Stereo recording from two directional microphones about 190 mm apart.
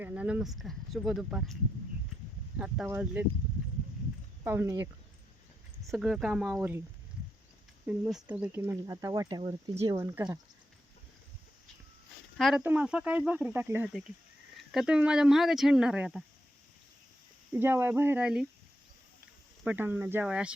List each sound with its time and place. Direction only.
0.0 s speech: 10° right (ahead or behind)
2.6 s speech: 5° right (ahead or behind)
4.4 s speech: 10° right (ahead or behind)
5.9 s speech: centre (ahead or behind)
7.9 s speech: 5° right (ahead or behind)
9.4 s speech: 30° right (ahead or behind)
9.8 s speech: 15° right (ahead or behind)
12.4 s speech: 5° right (ahead or behind)
17.5 s speech: 10° right (ahead or behind)
19.6 s speech: 10° right (ahead or behind)